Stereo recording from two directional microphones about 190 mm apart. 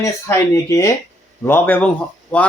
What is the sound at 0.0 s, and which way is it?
Speech, 15° left (ahead or behind).